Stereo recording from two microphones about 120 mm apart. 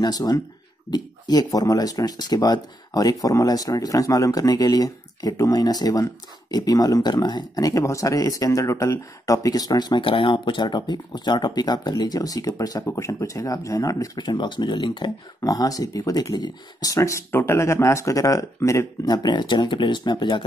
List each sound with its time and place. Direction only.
0.0 s speech: 35° left (ahead or behind)
15.4 s speech: 30° left (ahead or behind)